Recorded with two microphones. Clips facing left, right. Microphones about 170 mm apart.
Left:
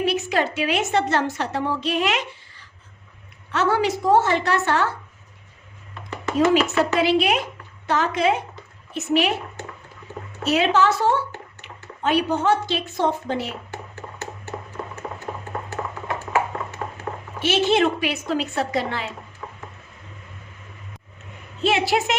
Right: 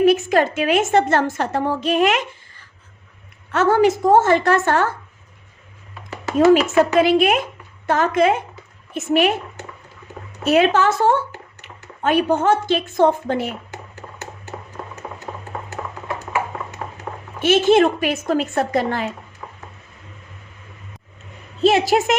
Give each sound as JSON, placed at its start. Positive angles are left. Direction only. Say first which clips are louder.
{"t": 0.0, "sound": "a woman's voice", "louder": "right 7 dB", "side_deg": -50}
{"t": 6.3, "sound": "a woman's voice", "louder": "right 5 dB", "side_deg": -50}
{"t": 10.4, "sound": "a woman's voice", "louder": "right 3 dB", "side_deg": -50}
{"t": 17.4, "sound": "a woman's voice", "louder": "right 5 dB", "side_deg": -50}
{"t": 21.6, "sound": "a woman's voice", "louder": "right 5 dB", "side_deg": -40}